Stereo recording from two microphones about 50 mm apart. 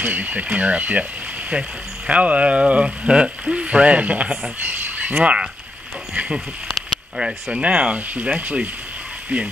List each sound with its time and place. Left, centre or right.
0.0 s speech: right
7.2 s speech: centre
7.6 s speech: right